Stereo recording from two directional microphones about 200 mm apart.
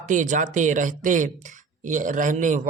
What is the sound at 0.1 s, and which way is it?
Speech, 40° right (ahead or behind).